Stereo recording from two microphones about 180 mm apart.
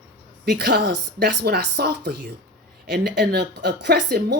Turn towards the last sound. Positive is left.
turn(degrees=-60)  # may be behind; listen again after turning